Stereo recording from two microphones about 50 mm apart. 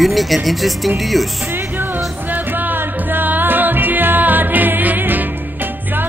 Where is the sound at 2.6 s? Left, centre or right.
Right.